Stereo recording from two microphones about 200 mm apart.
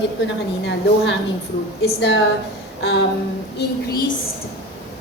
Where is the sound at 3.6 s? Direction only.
55° left (ahead or behind).